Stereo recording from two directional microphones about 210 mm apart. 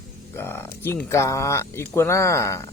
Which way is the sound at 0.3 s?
10° left (ahead or behind).